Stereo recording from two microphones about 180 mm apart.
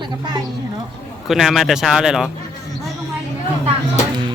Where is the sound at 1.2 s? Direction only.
Centre (ahead or behind).